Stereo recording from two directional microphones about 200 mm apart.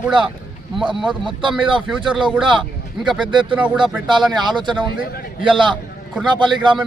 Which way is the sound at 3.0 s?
5° right (ahead or behind).